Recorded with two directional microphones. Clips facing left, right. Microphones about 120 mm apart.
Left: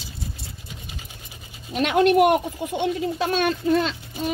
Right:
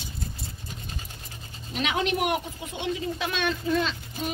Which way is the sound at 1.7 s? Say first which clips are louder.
Left 9 dB; 50° left (ahead or behind).